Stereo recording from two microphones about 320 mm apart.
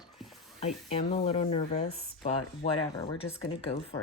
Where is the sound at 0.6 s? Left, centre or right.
Centre.